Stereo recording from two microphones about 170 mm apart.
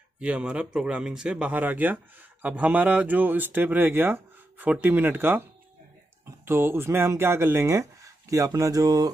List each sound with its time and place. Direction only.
0.2 s speech: 5° right (ahead or behind)
6.4 s speech: 15° right (ahead or behind)